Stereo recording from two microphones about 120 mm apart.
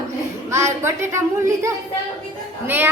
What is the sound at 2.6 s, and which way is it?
Speech, 15° right (ahead or behind).